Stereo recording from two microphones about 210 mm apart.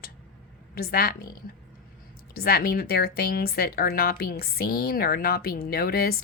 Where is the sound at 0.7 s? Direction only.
45° left (ahead or behind).